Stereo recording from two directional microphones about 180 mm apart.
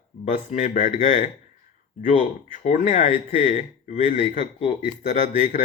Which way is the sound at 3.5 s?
45° left (ahead or behind).